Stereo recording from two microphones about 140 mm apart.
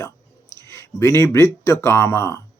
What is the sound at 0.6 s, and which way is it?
Speech, 20° left (ahead or behind).